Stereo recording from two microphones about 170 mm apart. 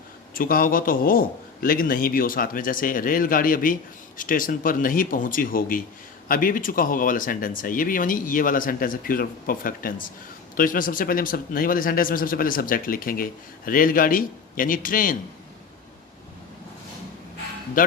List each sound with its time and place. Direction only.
0.3 s a man's voice: 55° left (ahead or behind)
17.8 s a man's voice: 55° left (ahead or behind)